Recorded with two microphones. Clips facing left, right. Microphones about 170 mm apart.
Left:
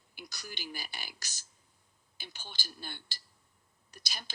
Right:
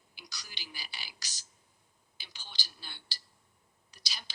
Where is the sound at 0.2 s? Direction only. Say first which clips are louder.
Left 6 dB; 50° left (ahead or behind).